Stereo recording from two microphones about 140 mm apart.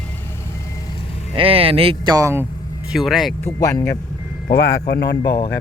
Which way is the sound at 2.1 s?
20° right (ahead or behind).